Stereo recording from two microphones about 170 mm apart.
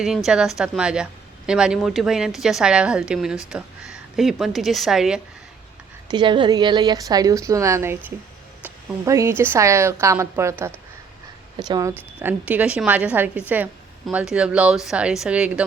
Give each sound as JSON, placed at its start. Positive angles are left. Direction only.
{"t": 0.0, "sound": "a woman's voice", "side_deg": -5}
{"t": 6.1, "sound": "a woman's voice", "side_deg": -25}
{"t": 11.5, "sound": "a woman's voice", "side_deg": -25}